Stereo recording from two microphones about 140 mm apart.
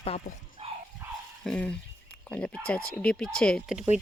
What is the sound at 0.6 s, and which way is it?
Dog, 50° right (ahead or behind).